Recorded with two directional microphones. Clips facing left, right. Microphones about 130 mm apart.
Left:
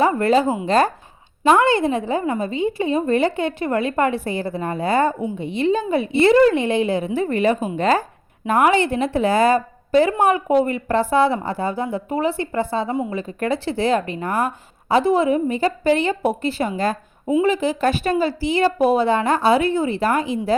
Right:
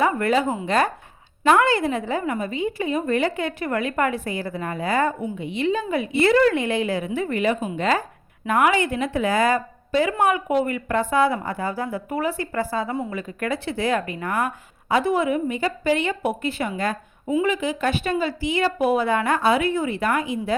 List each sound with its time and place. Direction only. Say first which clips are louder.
0.0 s a woman's voice: left 4 dB; 30° left (ahead or behind)